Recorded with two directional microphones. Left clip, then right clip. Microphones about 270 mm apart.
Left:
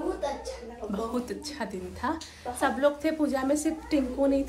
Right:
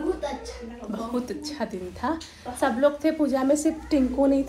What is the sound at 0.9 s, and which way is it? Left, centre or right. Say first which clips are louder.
A woman's voice: right 2 dB; centre.